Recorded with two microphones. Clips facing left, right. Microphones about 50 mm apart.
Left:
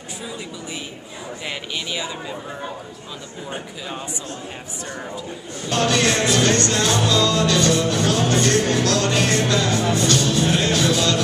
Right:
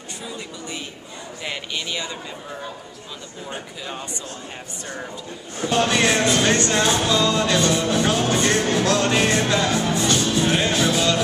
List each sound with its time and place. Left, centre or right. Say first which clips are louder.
1.4 s speech: right 1 dB; centre
3.4 s speech: left 1 dB; centre
5.7 s music: even; centre